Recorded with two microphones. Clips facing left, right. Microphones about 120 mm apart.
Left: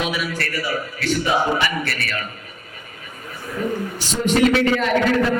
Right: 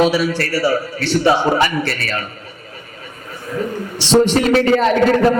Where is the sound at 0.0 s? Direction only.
30° right (ahead or behind).